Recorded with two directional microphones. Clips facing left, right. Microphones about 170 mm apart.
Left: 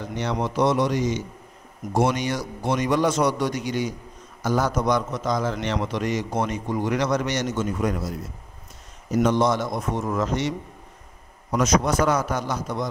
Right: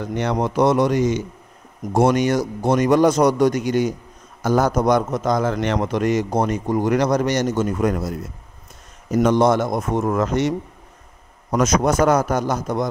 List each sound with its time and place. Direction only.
0.1 s a man's voice: 55° right (ahead or behind)
9.1 s a man's voice: 50° right (ahead or behind)
11.5 s a man's voice: 50° right (ahead or behind)